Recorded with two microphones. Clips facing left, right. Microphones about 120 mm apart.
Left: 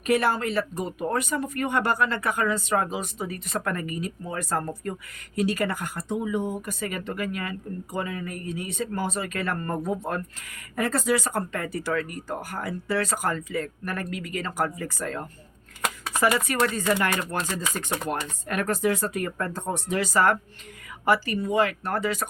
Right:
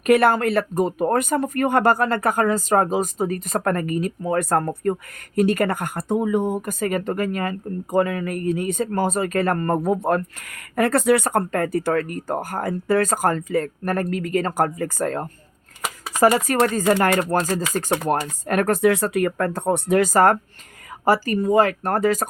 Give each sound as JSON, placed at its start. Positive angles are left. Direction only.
{"t": 0.0, "sound": "speech", "side_deg": -60}